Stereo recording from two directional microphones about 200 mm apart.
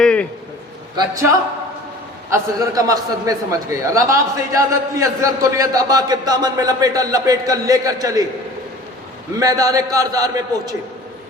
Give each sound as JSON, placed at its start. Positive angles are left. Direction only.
{"t": 0.0, "sound": "a sound", "side_deg": 5}
{"t": 2.3, "sound": "a man's voice", "side_deg": -15}
{"t": 9.3, "sound": "a man's voice", "side_deg": -15}